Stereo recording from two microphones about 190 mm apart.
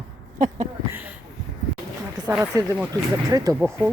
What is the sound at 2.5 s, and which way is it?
Speech, 20° right (ahead or behind).